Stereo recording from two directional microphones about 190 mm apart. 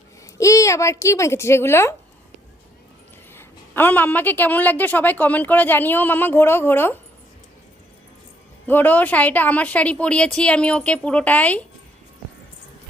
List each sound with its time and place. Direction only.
0.3 s a woman's voice: 15° left (ahead or behind)
3.3 s a woman's voice: 10° left (ahead or behind)
8.6 s a woman's voice: 10° left (ahead or behind)